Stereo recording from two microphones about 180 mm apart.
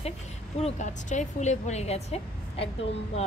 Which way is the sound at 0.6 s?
40° left (ahead or behind).